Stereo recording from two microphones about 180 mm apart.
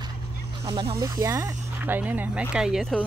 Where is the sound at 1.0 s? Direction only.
20° right (ahead or behind); by 3.0 s centre (ahead or behind).